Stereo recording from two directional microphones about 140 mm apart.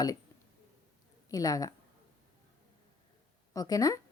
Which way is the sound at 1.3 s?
25° left (ahead or behind).